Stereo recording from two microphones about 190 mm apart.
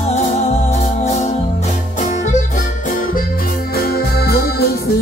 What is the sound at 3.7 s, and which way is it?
Music, 55° left (ahead or behind).